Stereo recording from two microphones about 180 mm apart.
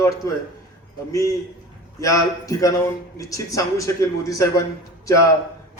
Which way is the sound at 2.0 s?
20° left (ahead or behind).